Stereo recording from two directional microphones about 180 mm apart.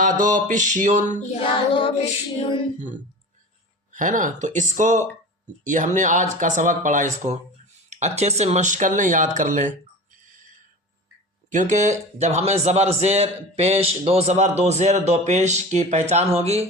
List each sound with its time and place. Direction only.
0.0 s speech: 45° right (ahead or behind)
1.4 s child singing: 30° left (ahead or behind)
2.7 s speech: 45° right (ahead or behind)
11.5 s a man's voice: 45° right (ahead or behind)